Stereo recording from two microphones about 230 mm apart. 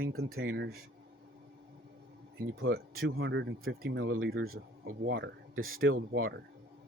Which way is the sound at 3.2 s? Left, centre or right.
Right.